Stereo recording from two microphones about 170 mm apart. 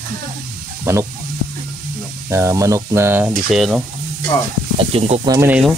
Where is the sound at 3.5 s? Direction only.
Centre (ahead or behind).